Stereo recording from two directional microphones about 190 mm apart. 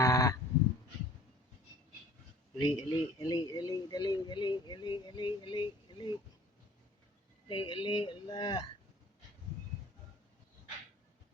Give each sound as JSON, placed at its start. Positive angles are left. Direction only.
{"t": 0.0, "sound": "sheep", "side_deg": 20}
{"t": 2.6, "sound": "speech", "side_deg": 25}
{"t": 7.4, "sound": "speech", "side_deg": 25}